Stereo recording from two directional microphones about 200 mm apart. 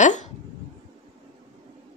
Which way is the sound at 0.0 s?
35° left (ahead or behind).